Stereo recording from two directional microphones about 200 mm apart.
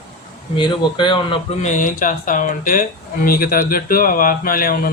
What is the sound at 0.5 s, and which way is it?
Speech, 25° left (ahead or behind).